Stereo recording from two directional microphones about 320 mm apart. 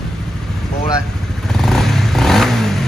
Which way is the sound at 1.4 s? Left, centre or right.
Centre.